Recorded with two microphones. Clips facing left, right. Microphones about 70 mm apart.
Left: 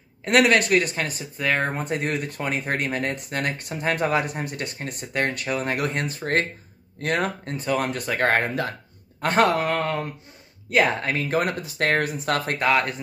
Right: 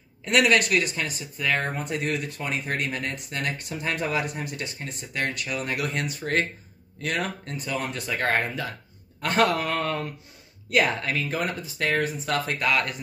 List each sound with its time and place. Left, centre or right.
0.4 s speech: left
7.7 s speech: left
9.2 s speech: left
12.6 s speech: left